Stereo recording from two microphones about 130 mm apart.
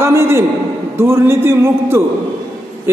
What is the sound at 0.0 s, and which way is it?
A man's voice, 20° right (ahead or behind).